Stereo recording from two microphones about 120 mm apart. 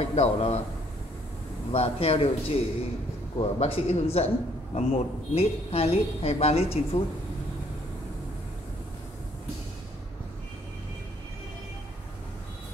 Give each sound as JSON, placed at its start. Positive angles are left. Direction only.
{"t": 0.0, "sound": "a woman's voice", "side_deg": 65}
{"t": 1.7, "sound": "a woman's voice", "side_deg": 55}